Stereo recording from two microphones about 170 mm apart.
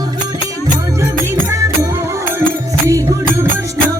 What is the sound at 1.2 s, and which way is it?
Music, 15° right (ahead or behind).